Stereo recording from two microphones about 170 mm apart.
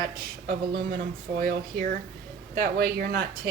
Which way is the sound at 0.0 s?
65° right (ahead or behind).